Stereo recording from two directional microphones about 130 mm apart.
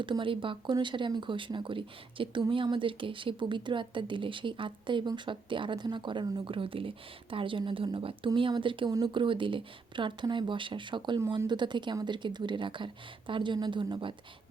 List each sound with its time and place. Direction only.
0.0 s a woman's voice: 40° right (ahead or behind)
8.9 s speech: 25° right (ahead or behind)
9.2 s a woman's voice: 40° right (ahead or behind)